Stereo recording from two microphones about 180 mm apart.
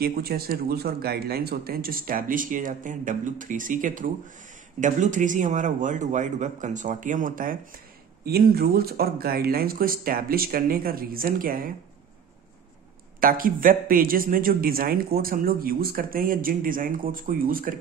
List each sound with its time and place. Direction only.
0.0 s a man's voice: 60° right (ahead or behind)
13.2 s a man's voice: 50° right (ahead or behind)